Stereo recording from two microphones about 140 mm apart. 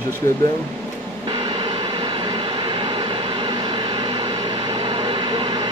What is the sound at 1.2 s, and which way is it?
Vehicle, 35° right (ahead or behind).